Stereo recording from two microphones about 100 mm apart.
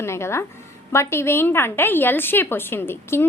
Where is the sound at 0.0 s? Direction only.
25° left (ahead or behind).